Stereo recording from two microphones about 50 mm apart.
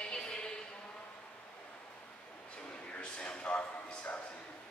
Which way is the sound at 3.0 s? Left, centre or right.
Left.